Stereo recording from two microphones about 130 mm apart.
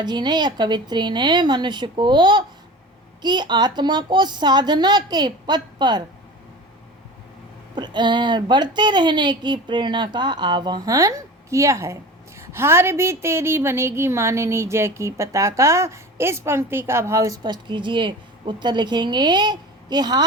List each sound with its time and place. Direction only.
0.0 s speech: 35° right (ahead or behind)
7.8 s speech: 35° right (ahead or behind)